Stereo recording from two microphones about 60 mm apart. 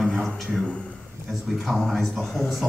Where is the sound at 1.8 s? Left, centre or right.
Centre.